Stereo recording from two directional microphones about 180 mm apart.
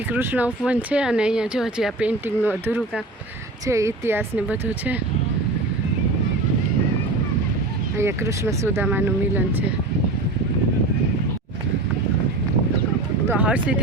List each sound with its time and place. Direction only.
0.1 s speech: 10° right (ahead or behind)
7.9 s speech: 15° right (ahead or behind)
13.2 s speech: 10° right (ahead or behind)